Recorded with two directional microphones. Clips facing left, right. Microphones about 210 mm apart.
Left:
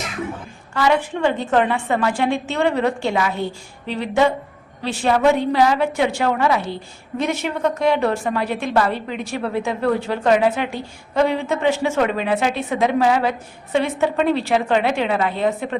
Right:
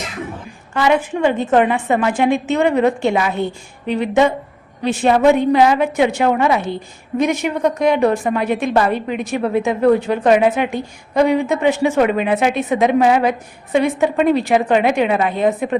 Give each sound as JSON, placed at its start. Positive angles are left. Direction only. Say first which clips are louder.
{"t": 0.7, "sound": "a woman's voice", "louder": "right 3 dB", "side_deg": -20}